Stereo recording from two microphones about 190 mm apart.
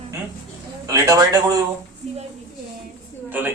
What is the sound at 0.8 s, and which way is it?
Speech, 20° right (ahead or behind).